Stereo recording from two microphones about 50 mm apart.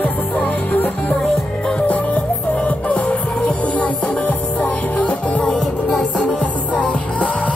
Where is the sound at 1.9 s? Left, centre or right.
Left.